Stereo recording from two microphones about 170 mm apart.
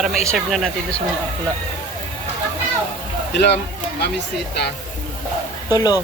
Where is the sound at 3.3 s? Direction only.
85° left.